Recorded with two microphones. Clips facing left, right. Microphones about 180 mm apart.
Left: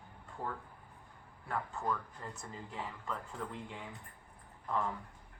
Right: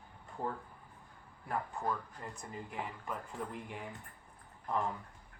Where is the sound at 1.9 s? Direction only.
15° right (ahead or behind).